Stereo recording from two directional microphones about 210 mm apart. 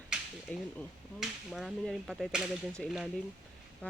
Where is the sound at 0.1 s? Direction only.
Centre (ahead or behind).